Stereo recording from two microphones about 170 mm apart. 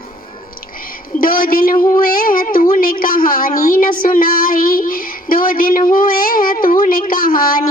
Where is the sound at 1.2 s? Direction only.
55° left (ahead or behind).